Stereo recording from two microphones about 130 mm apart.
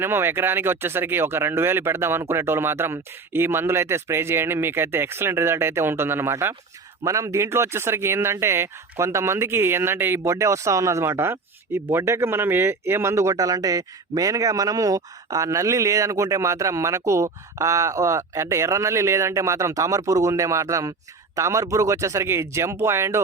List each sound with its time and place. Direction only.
0.0 s speech: 20° right (ahead or behind)